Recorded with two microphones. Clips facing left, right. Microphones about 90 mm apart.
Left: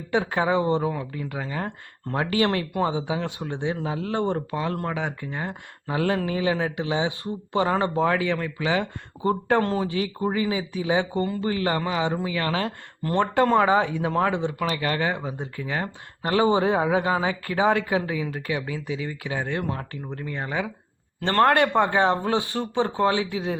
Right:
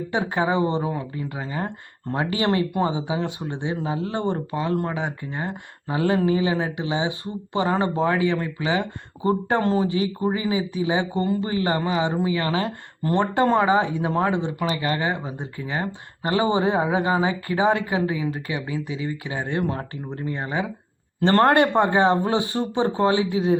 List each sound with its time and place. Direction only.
0.1 s speech: 10° right (ahead or behind)
19.5 s speech: 25° right (ahead or behind)
20.4 s speech: 15° right (ahead or behind)
21.2 s speech: 30° right (ahead or behind)
21.8 s speech: 15° right (ahead or behind)